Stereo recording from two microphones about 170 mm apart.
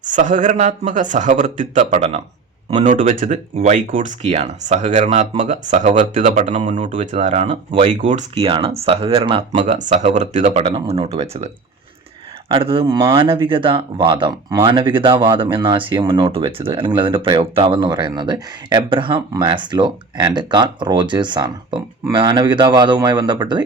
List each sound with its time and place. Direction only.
0.0 s speech: 50° right (ahead or behind); by 9.4 s 30° right (ahead or behind)
9.6 s speech: 45° right (ahead or behind)
12.5 s speech: 30° right (ahead or behind)